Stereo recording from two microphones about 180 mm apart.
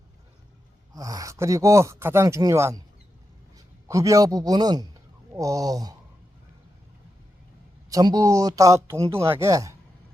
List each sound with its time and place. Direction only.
0.9 s speech: 20° right (ahead or behind)
3.8 s a man's voice: 20° right (ahead or behind)
7.9 s speech: 20° right (ahead or behind)